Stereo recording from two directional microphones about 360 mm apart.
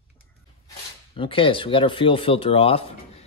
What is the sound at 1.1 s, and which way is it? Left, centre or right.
Speech, centre.